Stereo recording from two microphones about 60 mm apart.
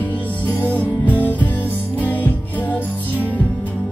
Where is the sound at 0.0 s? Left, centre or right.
Left.